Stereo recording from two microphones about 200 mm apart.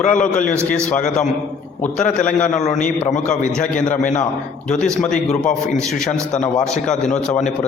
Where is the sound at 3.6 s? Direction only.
40° left (ahead or behind).